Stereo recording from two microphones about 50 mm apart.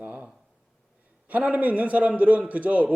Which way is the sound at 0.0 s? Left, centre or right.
Right.